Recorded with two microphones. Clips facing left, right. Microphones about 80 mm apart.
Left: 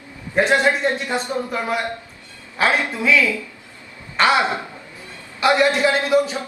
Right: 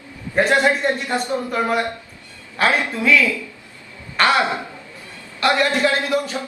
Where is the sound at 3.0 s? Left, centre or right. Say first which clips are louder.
Right 1 dB; centre.